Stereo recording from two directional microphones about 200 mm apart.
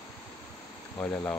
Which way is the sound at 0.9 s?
10° left (ahead or behind).